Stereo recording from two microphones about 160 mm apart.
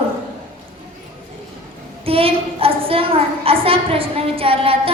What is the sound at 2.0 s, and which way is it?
A woman's voice, 35° right (ahead or behind).